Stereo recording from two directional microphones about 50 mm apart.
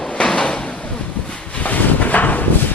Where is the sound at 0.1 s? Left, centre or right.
Left.